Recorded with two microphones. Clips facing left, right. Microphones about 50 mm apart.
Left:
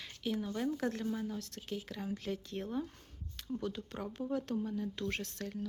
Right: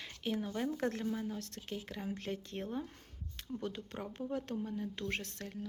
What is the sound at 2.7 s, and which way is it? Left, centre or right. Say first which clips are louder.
Speech: left 3 dB; centre.